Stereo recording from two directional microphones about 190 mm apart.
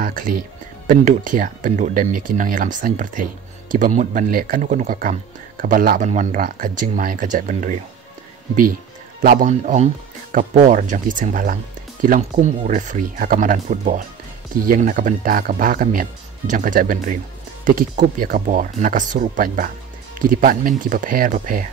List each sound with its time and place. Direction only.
0.0 s speech: 45° right (ahead or behind)
9.2 s speech: 45° right (ahead or behind)